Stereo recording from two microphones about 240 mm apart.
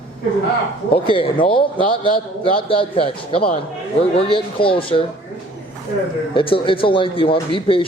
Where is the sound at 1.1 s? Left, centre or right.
Left.